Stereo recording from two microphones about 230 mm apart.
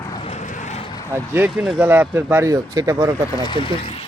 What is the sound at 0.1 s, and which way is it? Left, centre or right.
Vehicle, left.